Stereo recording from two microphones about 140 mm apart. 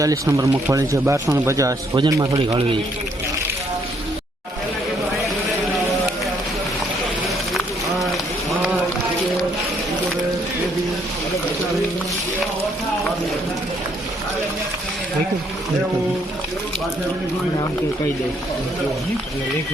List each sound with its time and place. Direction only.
0.0 s speech: 25° right (ahead or behind)
2.5 s a man's voice: 40° right (ahead or behind)